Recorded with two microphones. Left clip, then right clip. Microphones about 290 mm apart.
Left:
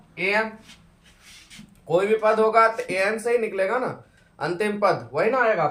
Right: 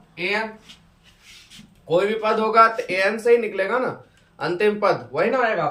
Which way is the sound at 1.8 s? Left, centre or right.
Left.